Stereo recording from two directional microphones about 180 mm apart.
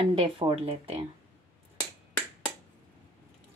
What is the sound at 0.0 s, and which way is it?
Speech, 30° right (ahead or behind).